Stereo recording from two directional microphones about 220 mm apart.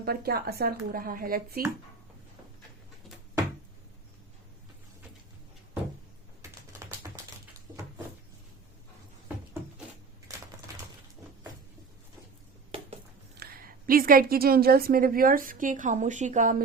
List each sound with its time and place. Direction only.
0.0 s speech: 45° right (ahead or behind)
7.1 s a sound: 10° right (ahead or behind)
13.3 s a woman's voice: 45° right (ahead or behind)